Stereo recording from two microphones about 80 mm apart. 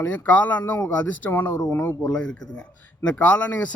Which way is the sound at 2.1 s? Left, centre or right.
Centre.